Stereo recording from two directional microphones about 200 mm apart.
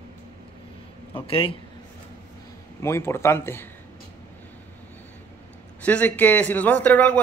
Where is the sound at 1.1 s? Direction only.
25° left (ahead or behind).